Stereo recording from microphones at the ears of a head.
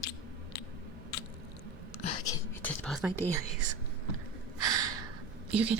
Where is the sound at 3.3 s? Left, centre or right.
Right.